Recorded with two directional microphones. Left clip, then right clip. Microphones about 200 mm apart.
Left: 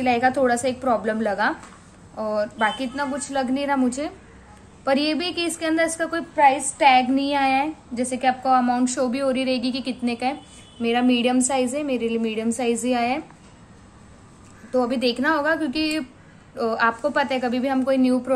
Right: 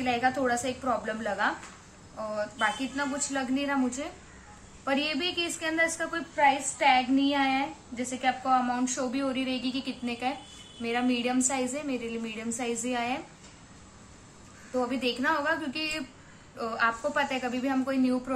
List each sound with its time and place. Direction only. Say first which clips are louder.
0.0 s a woman's voice: left 8 dB; 45° left (ahead or behind)
14.7 s a woman's voice: left 8 dB; 40° left (ahead or behind)